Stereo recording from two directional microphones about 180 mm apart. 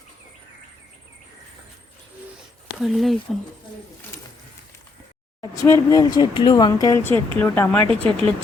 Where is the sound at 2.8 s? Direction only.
Centre (ahead or behind).